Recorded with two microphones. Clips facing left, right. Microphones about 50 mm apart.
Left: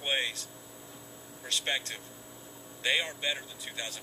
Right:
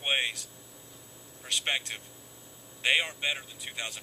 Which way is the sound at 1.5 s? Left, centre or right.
Right.